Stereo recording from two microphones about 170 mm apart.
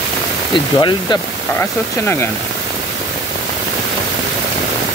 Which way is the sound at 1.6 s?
15° left (ahead or behind).